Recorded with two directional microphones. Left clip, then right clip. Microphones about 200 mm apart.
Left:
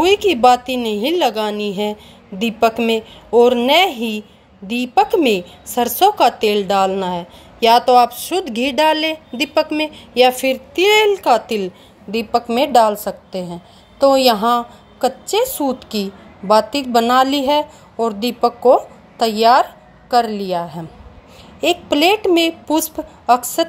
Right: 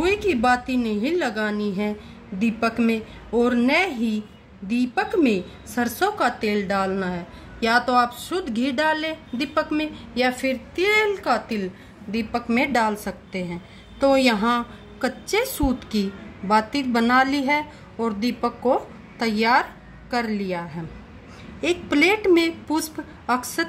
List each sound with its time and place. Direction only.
0.0 s a woman's voice: 25° left (ahead or behind)
12.4 s a woman's voice: 5° right (ahead or behind)
13.5 s a woman's voice: 20° left (ahead or behind)
21.8 s a woman's voice: 20° left (ahead or behind)